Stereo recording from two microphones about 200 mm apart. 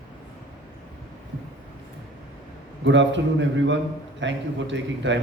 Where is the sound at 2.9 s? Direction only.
65° right (ahead or behind).